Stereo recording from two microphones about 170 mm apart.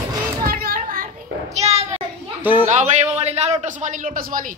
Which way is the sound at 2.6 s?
45° right (ahead or behind).